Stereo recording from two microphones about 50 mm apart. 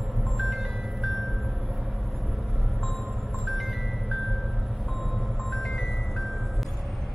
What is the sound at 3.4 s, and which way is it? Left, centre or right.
Music, centre.